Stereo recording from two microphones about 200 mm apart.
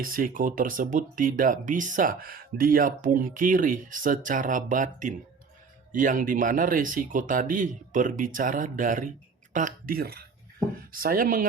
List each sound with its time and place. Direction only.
0.0 s speech: 45° right (ahead or behind)